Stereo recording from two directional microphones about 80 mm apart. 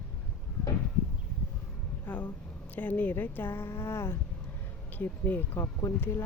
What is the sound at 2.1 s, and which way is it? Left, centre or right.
Speech, left.